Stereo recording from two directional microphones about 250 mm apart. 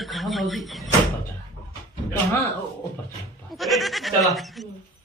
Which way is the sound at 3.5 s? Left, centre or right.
Centre.